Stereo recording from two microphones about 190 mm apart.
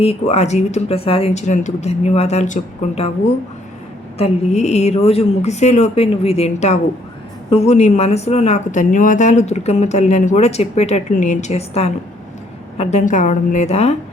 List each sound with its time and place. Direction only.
0.0 s a woman's voice: 30° left (ahead or behind)
4.2 s a woman's voice: 35° left (ahead or behind)